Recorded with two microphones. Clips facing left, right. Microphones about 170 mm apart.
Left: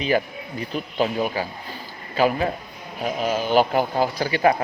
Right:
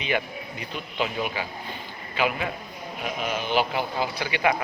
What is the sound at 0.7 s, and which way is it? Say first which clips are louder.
Speech: left 6 dB; 40° left (ahead or behind).